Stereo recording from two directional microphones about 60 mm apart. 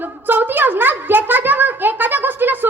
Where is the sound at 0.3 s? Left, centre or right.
Right.